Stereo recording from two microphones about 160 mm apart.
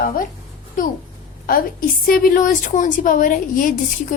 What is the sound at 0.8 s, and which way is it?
Speech, 60° left (ahead or behind).